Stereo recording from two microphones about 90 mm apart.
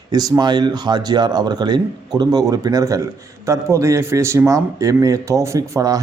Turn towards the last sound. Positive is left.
turn(degrees=-40)  # may be behind; listen again after turning